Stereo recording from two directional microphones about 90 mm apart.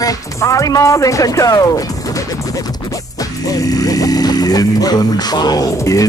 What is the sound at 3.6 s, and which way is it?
Speech, 45° left (ahead or behind).